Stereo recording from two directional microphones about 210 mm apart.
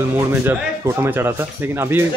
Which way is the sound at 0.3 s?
10° right (ahead or behind).